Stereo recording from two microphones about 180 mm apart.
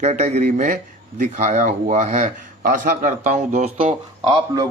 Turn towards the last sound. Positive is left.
turn(degrees=-25)  # may be behind; listen again after turning